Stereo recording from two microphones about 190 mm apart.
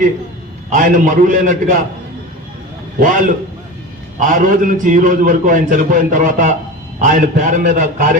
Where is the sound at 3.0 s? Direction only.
45° right (ahead or behind).